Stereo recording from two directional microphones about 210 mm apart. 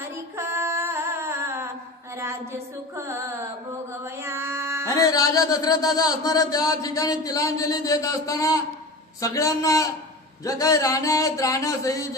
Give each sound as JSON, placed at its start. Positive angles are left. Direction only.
{"t": 0.1, "sound": "female singing", "side_deg": -15}
{"t": 2.5, "sound": "a sound", "side_deg": -10}
{"t": 4.0, "sound": "music", "side_deg": -10}
{"t": 4.9, "sound": "music", "side_deg": 15}